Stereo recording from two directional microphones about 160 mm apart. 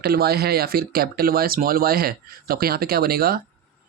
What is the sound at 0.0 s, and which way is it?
Speech, 75° right (ahead or behind).